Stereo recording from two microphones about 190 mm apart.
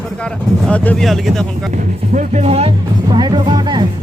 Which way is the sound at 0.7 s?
5° left (ahead or behind).